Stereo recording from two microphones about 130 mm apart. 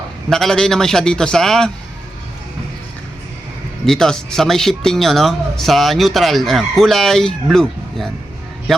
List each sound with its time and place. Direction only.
0.3 s speech: 5° left (ahead or behind)
3.8 s speech: 5° left (ahead or behind)